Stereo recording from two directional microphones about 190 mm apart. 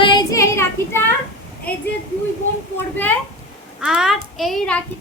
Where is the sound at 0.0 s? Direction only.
25° left (ahead or behind).